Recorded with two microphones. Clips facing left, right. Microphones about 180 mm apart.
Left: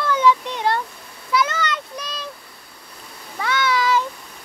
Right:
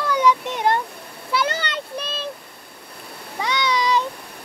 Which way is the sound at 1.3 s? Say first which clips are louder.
Left 2 dB; 30° right (ahead or behind).